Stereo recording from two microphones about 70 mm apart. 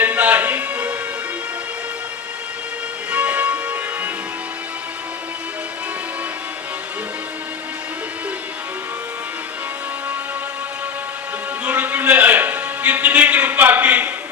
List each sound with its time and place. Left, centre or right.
0.0 s music: right
3.1 s music: right
11.6 s music: right